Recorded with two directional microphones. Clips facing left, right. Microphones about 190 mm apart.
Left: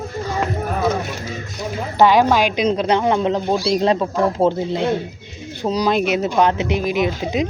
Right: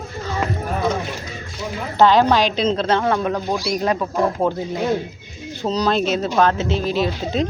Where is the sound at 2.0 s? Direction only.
10° left (ahead or behind).